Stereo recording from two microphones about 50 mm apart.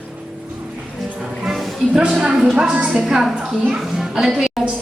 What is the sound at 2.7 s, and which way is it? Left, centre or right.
Speech, right.